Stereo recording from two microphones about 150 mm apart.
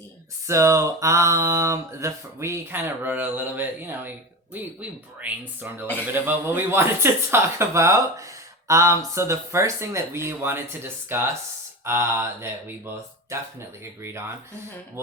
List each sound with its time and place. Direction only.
0.4 s mantra: 20° right (ahead or behind)
4.5 s speech: 10° right (ahead or behind)
8.6 s mantra: 20° right (ahead or behind)
11.9 s speech: 15° right (ahead or behind)